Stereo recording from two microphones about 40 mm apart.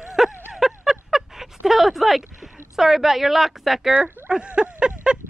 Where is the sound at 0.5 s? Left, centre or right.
Centre.